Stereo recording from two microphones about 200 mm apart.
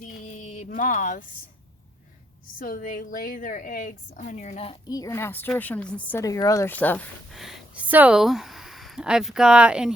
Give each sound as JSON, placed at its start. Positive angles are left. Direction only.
{"t": 0.0, "sound": "a sound", "side_deg": 35}
{"t": 2.6, "sound": "a woman's voice", "side_deg": 45}
{"t": 7.4, "sound": "speech", "side_deg": -5}